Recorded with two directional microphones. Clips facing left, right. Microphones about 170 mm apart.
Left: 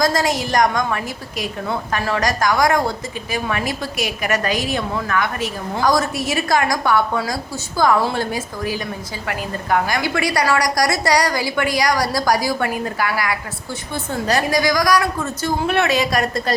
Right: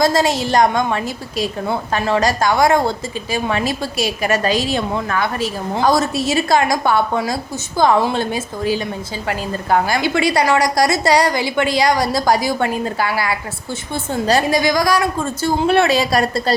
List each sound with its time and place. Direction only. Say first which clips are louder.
0.0 s a woman's voice: right 3 dB; 25° right (ahead or behind)